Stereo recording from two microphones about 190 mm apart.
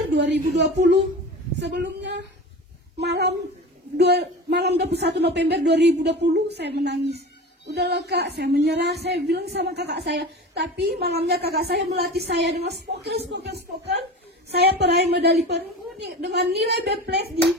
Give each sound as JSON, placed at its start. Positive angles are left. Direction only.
{"t": 0.1, "sound": "a woman's voice", "side_deg": -65}